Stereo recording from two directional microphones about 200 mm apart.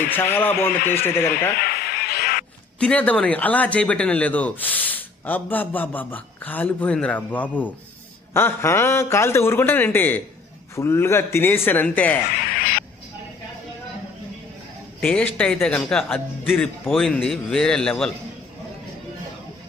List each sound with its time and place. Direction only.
0.1 s speech: 10° left (ahead or behind)
1.5 s a sound: 50° left (ahead or behind)
2.8 s speech: 5° left (ahead or behind)
12.4 s duck: 50° left (ahead or behind)
15.0 s speech: 5° left (ahead or behind)